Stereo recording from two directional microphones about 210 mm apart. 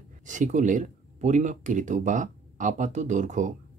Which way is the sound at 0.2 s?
35° right (ahead or behind).